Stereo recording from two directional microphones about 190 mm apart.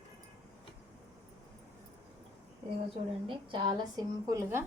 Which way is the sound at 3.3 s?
25° right (ahead or behind).